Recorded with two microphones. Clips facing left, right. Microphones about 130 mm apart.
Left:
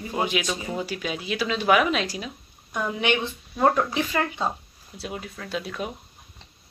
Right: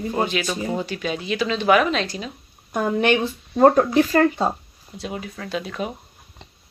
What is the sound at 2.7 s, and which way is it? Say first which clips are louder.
Speech: right 6 dB; 45° right (ahead or behind).